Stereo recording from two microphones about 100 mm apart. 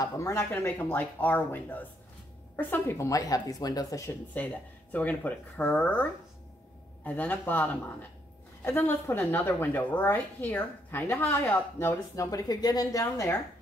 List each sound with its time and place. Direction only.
0.0 s speech: 30° left (ahead or behind)
0.5 s a woman's voice: 20° left (ahead or behind); by 4.1 s 35° left (ahead or behind)
4.4 s a woman's voice: 20° left (ahead or behind)
7.1 s a woman's voice: 20° left (ahead or behind)
12.2 s speech: 35° left (ahead or behind)
13.0 s a woman's voice: 30° left (ahead or behind)